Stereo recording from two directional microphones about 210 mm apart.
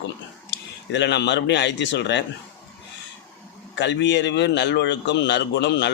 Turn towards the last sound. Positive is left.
turn(degrees=55)  # may be behind; listen again after turning